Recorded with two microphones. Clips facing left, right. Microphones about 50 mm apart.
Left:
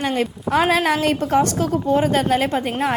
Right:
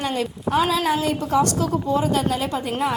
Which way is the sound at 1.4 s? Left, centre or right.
Left.